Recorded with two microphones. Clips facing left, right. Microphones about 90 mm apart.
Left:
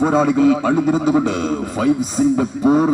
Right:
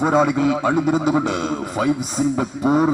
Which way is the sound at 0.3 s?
25° right (ahead or behind).